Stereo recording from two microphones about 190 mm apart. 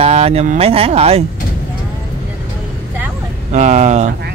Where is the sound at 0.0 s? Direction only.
30° right (ahead or behind).